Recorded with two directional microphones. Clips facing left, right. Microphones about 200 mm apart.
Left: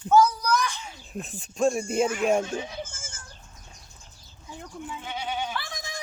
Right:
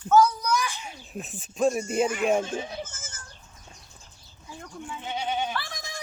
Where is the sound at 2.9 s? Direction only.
10° left (ahead or behind).